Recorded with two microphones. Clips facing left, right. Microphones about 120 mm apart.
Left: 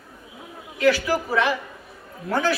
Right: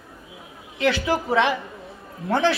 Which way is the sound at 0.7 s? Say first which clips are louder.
Left 2 dB; 25° right (ahead or behind).